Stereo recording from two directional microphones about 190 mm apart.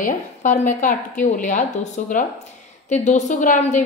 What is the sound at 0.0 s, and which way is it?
A woman's voice, 40° left (ahead or behind).